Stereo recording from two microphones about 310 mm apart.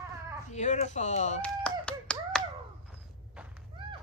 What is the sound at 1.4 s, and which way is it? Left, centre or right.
Finger snapping, centre.